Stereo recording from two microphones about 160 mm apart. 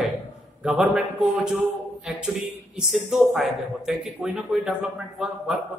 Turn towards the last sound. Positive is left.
turn(degrees=-5)  # may be behind; listen again after turning